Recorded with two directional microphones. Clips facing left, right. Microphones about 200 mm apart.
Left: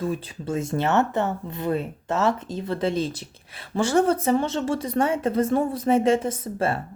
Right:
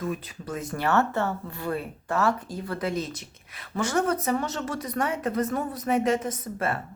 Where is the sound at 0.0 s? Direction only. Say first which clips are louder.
Left 4 dB; 30° left (ahead or behind).